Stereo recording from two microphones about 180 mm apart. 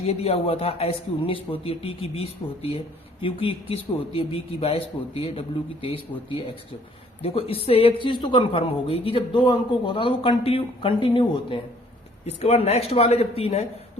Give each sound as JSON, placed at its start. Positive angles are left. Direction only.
{"t": 0.0, "sound": "a woman's voice", "side_deg": 35}